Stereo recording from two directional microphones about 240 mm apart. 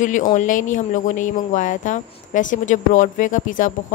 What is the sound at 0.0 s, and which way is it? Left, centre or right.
Speech, left.